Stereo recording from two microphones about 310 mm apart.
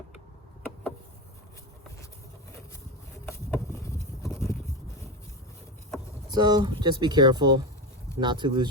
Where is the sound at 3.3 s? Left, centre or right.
Centre.